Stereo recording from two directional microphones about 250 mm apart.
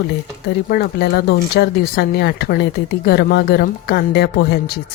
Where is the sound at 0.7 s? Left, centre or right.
Left.